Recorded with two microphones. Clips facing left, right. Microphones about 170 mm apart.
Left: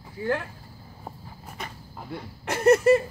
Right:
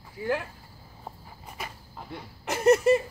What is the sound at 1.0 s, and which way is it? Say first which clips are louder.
Walk: left 2 dB; centre (ahead or behind).